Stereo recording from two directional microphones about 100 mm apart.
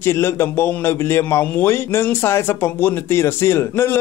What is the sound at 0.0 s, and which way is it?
A man's voice, 25° left (ahead or behind).